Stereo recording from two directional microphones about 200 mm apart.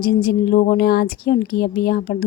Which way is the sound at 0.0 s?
50° left (ahead or behind).